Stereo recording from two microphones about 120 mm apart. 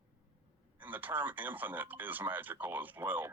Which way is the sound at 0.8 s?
15° right (ahead or behind).